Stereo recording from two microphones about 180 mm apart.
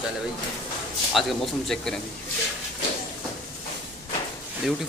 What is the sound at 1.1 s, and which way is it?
Speech, centre (ahead or behind).